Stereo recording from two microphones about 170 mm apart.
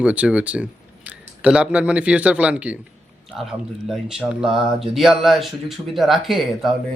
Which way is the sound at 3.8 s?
5° right (ahead or behind).